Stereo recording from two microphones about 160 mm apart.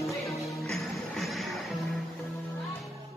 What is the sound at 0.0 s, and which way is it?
Music, centre (ahead or behind).